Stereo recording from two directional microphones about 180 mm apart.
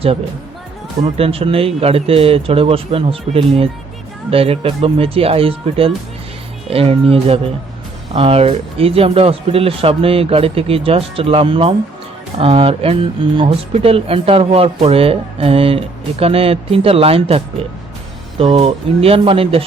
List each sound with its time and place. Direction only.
1.1 s speech: 30° right (ahead or behind)